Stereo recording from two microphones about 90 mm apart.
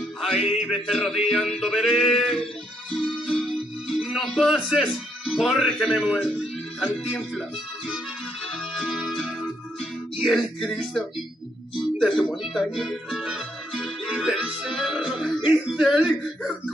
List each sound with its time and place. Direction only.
0.2 s music: 5° right (ahead or behind)
12.3 s speech: 5° right (ahead or behind)